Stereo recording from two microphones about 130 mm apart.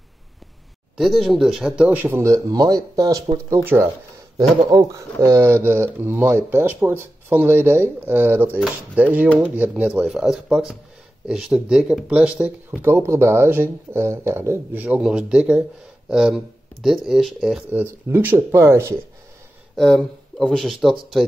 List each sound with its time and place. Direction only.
0.9 s speech: centre (ahead or behind); by 18.9 s 20° right (ahead or behind)
19.7 s speech: centre (ahead or behind)